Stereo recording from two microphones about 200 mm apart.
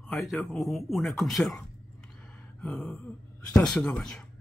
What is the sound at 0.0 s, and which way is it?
Speech, centre (ahead or behind).